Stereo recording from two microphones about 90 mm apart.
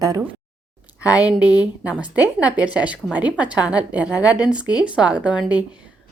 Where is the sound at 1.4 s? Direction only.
50° left (ahead or behind).